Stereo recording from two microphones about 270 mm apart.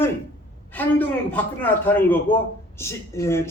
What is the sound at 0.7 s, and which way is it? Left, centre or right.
A man's voice, centre.